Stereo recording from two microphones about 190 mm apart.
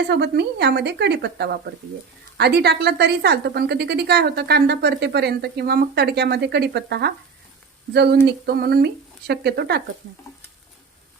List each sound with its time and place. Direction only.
0.1 s a woman's voice: 60° right (ahead or behind)